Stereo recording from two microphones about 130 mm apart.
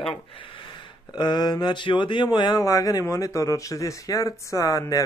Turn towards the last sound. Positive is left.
turn(degrees=25)  # may be behind; listen again after turning